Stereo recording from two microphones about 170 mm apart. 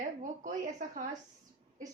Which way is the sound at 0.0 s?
45° right (ahead or behind).